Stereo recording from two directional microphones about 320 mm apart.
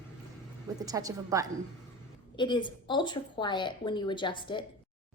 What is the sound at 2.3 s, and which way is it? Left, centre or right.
A woman's voice, centre.